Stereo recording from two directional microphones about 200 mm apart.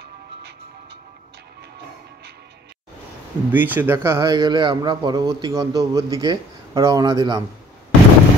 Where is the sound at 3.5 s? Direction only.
10° right (ahead or behind).